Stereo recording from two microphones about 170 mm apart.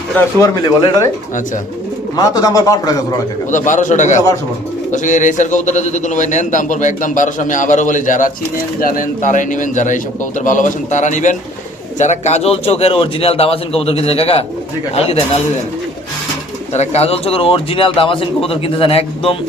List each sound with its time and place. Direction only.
0.2 s speech: 20° left (ahead or behind)
2.1 s speech: 20° left (ahead or behind)
3.5 s a man's voice: 50° left (ahead or behind)
16.7 s a man's voice: 40° left (ahead or behind)